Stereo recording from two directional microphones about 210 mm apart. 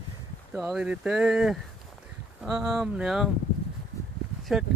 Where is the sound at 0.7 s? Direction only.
5° right (ahead or behind).